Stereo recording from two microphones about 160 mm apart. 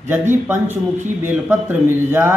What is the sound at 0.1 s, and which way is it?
Speech, 15° right (ahead or behind).